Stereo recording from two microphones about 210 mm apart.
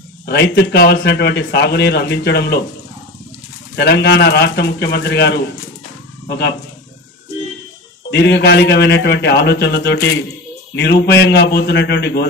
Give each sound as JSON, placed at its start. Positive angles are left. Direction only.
{"t": 0.3, "sound": "a man's voice", "side_deg": 55}
{"t": 3.7, "sound": "a man's voice", "side_deg": 55}
{"t": 8.1, "sound": "a man's voice", "side_deg": 55}